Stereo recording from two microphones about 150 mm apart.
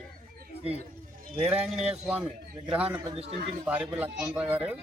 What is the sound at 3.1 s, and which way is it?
Speech, 40° right (ahead or behind).